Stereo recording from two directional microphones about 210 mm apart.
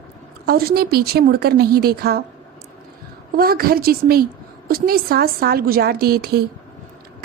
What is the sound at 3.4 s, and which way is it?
A woman's voice, 45° right (ahead or behind).